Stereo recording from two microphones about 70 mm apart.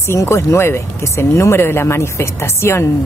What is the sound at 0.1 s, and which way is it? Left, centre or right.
A woman's voice, left.